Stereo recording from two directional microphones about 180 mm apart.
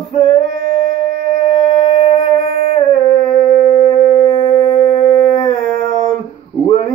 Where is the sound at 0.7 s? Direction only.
30° left (ahead or behind).